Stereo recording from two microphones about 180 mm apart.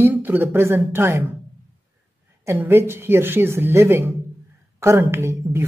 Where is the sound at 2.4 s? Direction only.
15° right (ahead or behind).